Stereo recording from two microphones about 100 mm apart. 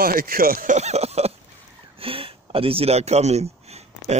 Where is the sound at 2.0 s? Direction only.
70° right (ahead or behind); by 3.8 s 90° right.